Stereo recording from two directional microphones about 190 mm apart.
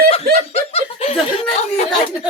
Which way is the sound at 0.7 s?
30° left (ahead or behind).